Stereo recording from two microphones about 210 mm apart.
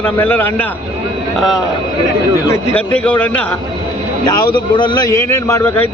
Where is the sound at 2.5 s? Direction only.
5° left (ahead or behind).